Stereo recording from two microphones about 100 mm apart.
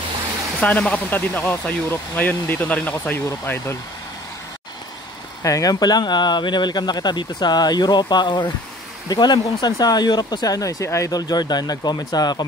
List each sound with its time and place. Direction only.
0.6 s speech: 10° left (ahead or behind)
5.4 s speech: 35° left (ahead or behind)